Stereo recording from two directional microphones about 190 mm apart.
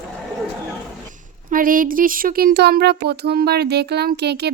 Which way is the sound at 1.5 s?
45° right (ahead or behind).